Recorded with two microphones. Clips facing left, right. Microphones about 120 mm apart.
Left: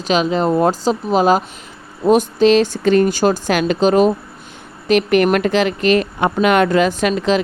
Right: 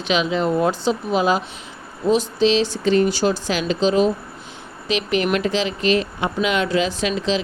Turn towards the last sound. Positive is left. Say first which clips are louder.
# left 5 dB
turn(degrees=50)  # may be behind; listen again after turning